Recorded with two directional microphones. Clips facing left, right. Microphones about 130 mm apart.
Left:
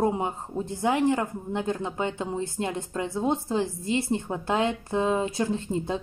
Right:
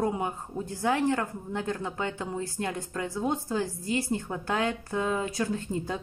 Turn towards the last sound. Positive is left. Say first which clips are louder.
# left 3 dB
turn(degrees=25)  # may be behind; listen again after turning